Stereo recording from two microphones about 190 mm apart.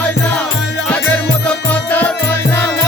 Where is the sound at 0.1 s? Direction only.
5° left (ahead or behind).